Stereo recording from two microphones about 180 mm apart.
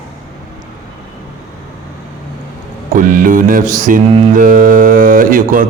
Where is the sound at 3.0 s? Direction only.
50° right (ahead or behind).